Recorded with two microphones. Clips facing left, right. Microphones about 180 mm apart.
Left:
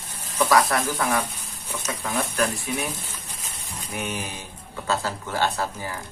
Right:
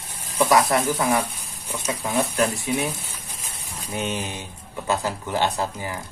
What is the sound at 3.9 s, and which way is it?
Speech, 25° right (ahead or behind).